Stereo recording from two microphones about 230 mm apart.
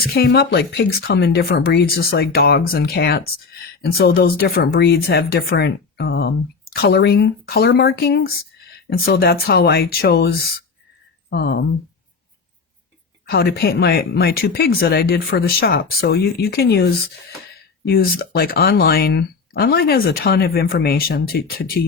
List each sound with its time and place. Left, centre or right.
0.0 s speech: left
13.2 s speech: left